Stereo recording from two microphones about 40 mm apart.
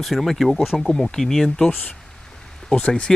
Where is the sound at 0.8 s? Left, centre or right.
Centre.